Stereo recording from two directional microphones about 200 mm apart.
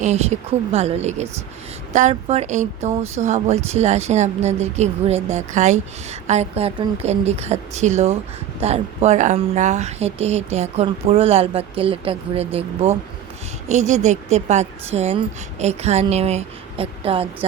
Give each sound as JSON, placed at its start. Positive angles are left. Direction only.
{"t": 0.0, "sound": "speech", "side_deg": -35}